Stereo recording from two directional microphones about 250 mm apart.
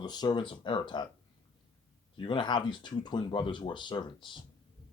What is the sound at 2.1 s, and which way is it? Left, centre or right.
Speech, centre.